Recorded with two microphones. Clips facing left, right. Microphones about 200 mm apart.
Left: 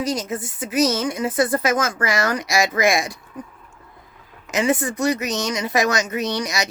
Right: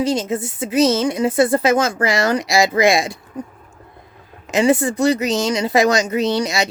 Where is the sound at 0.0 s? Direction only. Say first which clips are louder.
Right 5 dB; 25° right (ahead or behind).